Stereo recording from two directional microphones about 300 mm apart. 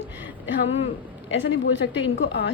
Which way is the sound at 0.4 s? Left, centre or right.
Left.